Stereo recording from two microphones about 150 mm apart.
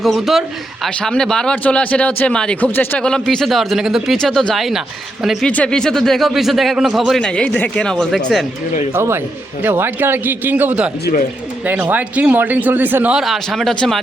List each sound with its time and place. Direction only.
0.0 s a man's voice: centre (ahead or behind)
8.9 s speech: 15° right (ahead or behind)
11.0 s speech: 65° left (ahead or behind)
11.6 s speech: 10° right (ahead or behind)